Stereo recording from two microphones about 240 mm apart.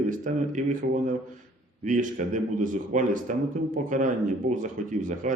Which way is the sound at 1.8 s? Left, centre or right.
Right.